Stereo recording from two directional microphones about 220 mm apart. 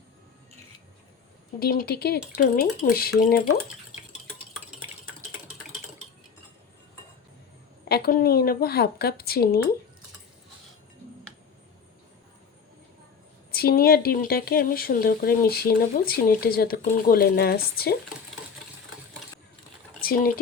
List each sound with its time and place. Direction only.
1.5 s speech: 45° left (ahead or behind)
7.9 s speech: 45° left (ahead or behind)
13.5 s speech: 45° left (ahead or behind)
20.0 s speech: 40° left (ahead or behind)